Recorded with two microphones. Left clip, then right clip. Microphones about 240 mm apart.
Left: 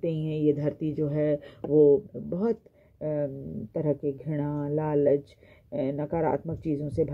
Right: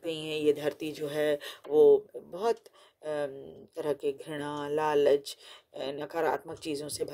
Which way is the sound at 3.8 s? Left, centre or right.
Right.